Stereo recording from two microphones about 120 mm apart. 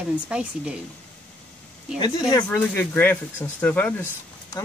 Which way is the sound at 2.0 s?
35° left (ahead or behind).